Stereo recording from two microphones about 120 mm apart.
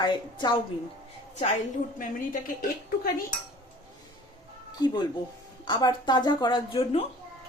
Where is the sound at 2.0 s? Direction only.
90° left.